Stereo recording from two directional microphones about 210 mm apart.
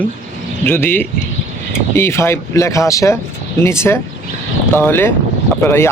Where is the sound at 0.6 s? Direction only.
10° left (ahead or behind).